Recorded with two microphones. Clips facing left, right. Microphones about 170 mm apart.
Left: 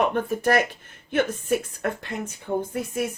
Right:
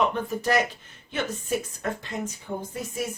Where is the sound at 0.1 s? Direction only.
55° left (ahead or behind).